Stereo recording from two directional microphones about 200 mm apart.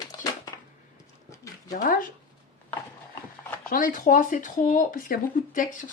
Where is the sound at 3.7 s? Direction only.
45° left (ahead or behind).